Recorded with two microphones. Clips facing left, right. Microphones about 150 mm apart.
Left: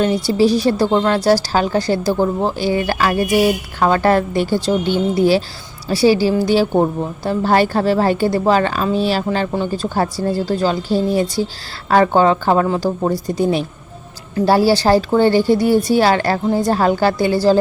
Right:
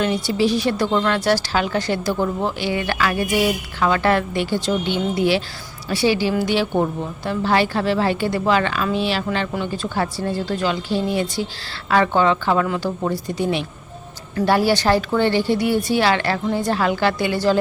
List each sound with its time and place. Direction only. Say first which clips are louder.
0.0 s a woman's voice: left 5 dB; 35° left (ahead or behind)